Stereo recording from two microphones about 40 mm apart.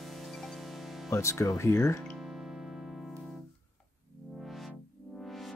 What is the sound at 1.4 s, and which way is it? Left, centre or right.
Speech, left.